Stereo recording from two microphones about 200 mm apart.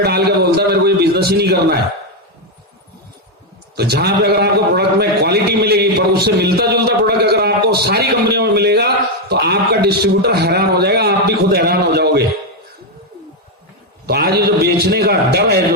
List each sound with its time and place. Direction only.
0.0 s a sound: 55° right (ahead or behind)
3.8 s a man's voice: 55° right (ahead or behind)
14.1 s a man's voice: 50° right (ahead or behind)